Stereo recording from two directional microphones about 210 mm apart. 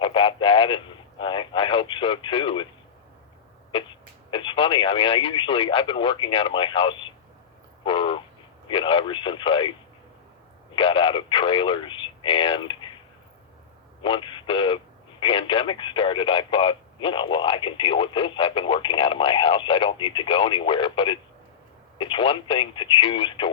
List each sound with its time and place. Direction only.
0.0 s radio: 25° left (ahead or behind)
4.3 s speech: 25° left (ahead or behind)
7.9 s crow: 25° left (ahead or behind)
8.6 s speech: 25° left (ahead or behind)
10.8 s speech: 25° left (ahead or behind)
14.0 s speech: 25° left (ahead or behind)